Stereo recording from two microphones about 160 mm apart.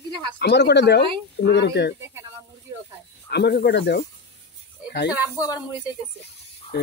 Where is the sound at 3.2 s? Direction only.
90° left.